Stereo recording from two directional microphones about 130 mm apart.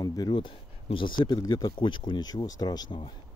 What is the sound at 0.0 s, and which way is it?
Speech, 30° left (ahead or behind).